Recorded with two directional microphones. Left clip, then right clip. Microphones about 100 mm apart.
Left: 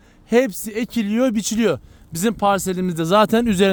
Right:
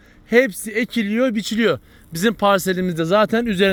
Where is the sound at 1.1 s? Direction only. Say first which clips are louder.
Even; 90° left; by 1.8 s 55° left (ahead or behind).